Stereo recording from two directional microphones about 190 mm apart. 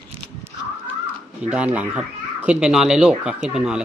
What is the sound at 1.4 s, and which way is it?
Speech, 5° right (ahead or behind).